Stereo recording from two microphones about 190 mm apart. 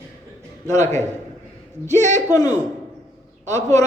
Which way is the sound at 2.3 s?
20° left (ahead or behind).